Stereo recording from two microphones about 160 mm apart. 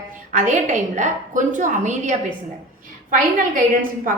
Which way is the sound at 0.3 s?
50° right (ahead or behind).